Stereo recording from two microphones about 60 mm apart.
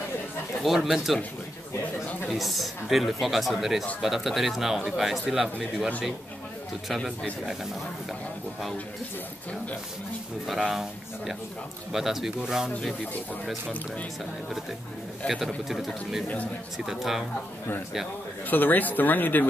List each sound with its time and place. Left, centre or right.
0.7 s speech: centre
2.2 s speech: centre
10.4 s speech: centre
15.2 s speech: centre
18.5 s speech: left